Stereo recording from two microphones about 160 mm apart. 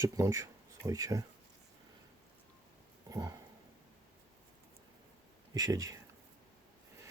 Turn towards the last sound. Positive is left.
turn(degrees=-20)  # may be behind; listen again after turning